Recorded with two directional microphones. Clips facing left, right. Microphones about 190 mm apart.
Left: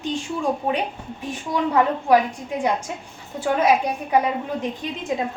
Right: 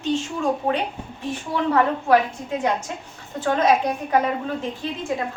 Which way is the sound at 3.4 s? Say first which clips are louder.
Even; 10° left (ahead or behind).